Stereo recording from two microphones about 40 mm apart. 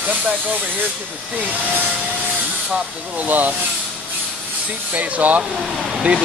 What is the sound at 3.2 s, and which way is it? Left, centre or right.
Speech, right.